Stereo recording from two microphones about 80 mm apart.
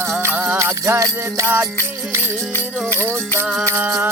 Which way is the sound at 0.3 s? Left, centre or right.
Right.